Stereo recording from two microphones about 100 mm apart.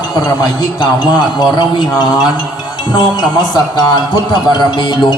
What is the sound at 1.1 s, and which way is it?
Speech, 45° left (ahead or behind).